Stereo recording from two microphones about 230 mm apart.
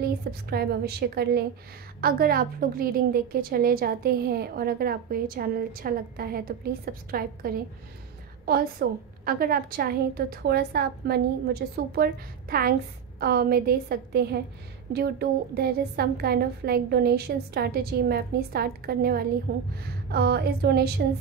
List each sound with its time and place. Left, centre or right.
0.0 s a woman's voice: right